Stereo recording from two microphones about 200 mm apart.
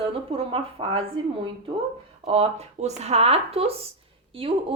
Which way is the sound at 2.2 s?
30° right (ahead or behind).